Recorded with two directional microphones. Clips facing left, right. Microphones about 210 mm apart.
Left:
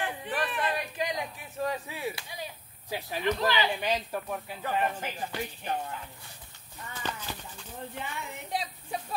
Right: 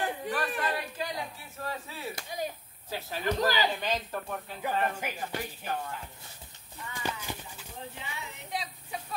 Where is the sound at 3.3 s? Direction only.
40° right (ahead or behind).